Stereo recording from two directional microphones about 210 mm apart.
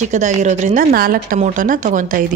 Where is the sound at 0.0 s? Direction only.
35° right (ahead or behind).